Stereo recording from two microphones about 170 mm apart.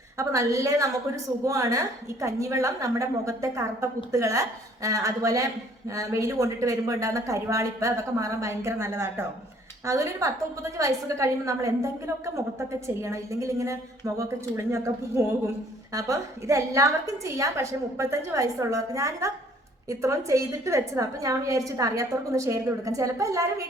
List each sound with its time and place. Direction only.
0.2 s a woman's voice: 20° right (ahead or behind)